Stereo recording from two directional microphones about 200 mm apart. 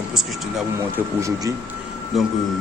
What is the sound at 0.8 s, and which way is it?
Speech, 15° right (ahead or behind).